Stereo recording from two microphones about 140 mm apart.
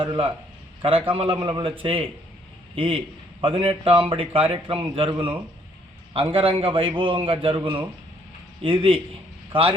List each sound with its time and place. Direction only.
0.0 s a man's voice: 40° right (ahead or behind)